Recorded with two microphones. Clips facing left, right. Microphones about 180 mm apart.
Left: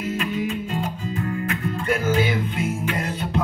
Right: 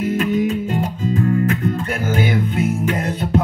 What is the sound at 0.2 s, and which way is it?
Music, 45° right (ahead or behind).